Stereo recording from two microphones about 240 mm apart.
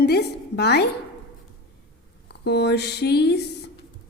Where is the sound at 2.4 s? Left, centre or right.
Left.